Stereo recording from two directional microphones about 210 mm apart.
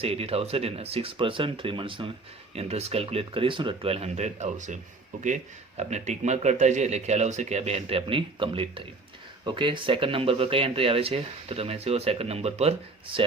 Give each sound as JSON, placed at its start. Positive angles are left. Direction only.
{"t": 0.0, "sound": "a man's voice", "side_deg": -30}